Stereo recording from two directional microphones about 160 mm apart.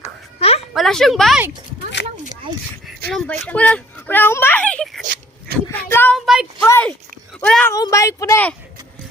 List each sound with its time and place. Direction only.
0.0 s music: 40° left (ahead or behind)
0.7 s speech: centre (ahead or behind)
3.1 s speech: 5° left (ahead or behind)
6.1 s a sound: 5° right (ahead or behind)
6.6 s speech: 15° left (ahead or behind)
7.7 s speech: 20° left (ahead or behind)